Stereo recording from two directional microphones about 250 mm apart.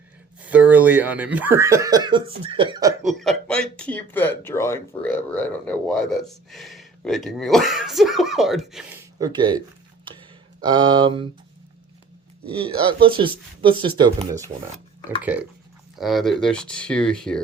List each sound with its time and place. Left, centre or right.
0.4 s speech: centre
3.1 s speech: centre
9.1 s speech: centre
10.1 s a sound: centre
10.6 s speech: centre
12.5 s speech: right
15.0 s speech: centre